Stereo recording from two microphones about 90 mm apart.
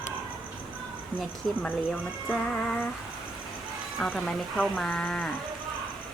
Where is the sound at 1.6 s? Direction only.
20° left (ahead or behind).